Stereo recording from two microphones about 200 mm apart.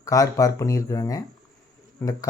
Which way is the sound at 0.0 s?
15° left (ahead or behind).